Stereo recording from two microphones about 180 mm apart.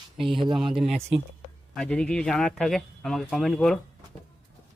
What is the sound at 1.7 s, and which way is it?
Speech, 5° left (ahead or behind).